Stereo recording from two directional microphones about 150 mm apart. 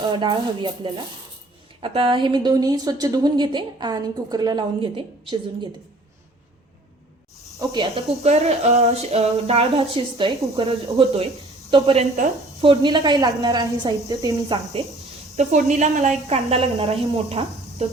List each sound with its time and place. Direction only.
0.1 s a woman's voice: 30° right (ahead or behind)
7.7 s speech: 35° right (ahead or behind)
12.6 s a woman's voice: 30° right (ahead or behind)
15.4 s speech: 50° right (ahead or behind)